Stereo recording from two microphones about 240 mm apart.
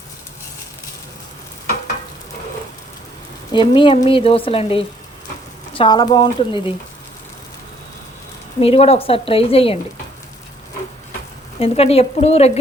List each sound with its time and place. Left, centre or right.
3.5 s a woman's voice: centre
8.6 s a woman's voice: left
11.6 s a woman's voice: left